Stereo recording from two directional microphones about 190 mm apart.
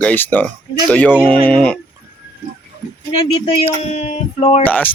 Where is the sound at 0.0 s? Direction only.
10° left (ahead or behind).